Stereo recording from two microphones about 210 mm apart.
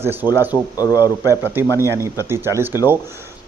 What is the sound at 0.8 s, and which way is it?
Speech, 15° left (ahead or behind).